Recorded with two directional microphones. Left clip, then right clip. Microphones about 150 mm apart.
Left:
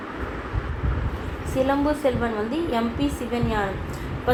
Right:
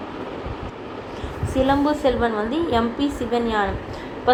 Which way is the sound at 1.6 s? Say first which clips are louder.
Right 3 dB; 30° right (ahead or behind).